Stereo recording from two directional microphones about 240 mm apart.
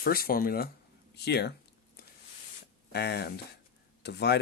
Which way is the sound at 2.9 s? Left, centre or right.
Left.